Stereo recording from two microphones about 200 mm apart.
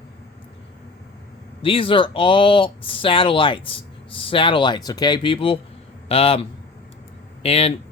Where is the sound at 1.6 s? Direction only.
25° left (ahead or behind).